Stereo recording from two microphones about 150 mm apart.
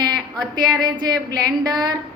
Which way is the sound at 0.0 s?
30° right (ahead or behind).